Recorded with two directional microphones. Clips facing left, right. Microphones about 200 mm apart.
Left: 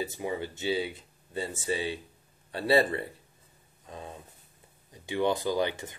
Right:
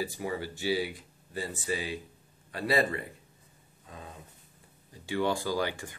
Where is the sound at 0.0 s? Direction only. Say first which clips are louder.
Left 1 dB; 20° left (ahead or behind).